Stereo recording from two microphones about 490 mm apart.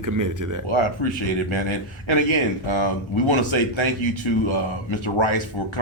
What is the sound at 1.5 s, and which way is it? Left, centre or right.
Speech, left.